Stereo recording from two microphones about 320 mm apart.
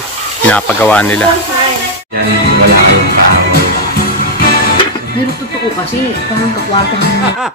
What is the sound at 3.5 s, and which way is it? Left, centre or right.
Music, left.